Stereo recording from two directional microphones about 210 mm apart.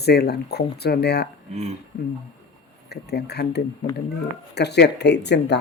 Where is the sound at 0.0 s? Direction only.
50° left (ahead or behind).